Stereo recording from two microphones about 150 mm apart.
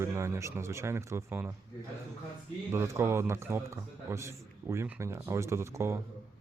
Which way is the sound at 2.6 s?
15° right (ahead or behind).